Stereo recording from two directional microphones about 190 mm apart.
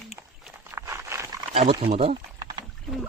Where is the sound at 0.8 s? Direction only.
15° right (ahead or behind).